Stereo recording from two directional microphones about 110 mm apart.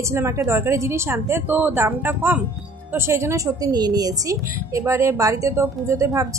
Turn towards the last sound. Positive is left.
turn(degrees=-30)  # may be behind; listen again after turning